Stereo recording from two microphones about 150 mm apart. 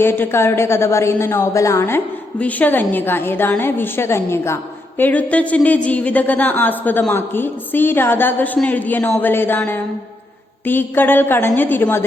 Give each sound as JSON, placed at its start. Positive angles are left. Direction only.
{"t": 0.0, "sound": "a woman's voice", "side_deg": 15}